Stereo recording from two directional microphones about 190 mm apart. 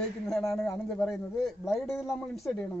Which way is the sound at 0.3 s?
Centre (ahead or behind).